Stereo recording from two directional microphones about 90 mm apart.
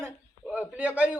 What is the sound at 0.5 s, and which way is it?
Speech, 15° right (ahead or behind).